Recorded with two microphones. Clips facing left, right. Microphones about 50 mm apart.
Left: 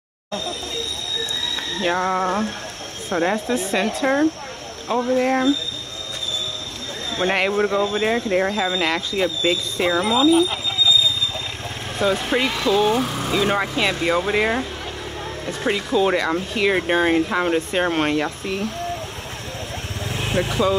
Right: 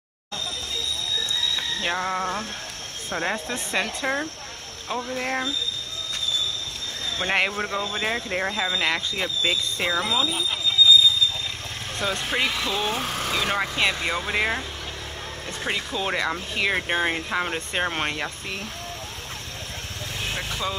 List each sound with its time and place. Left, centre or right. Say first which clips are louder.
1.8 s speech: left 7 dB; centre
7.2 s speech: left 5 dB; centre
12.0 s speech: left 6 dB; centre
20.2 s speech: left 9 dB; centre